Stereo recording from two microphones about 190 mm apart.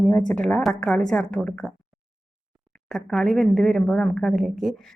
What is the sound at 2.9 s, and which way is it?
A woman's voice, 5° left (ahead or behind).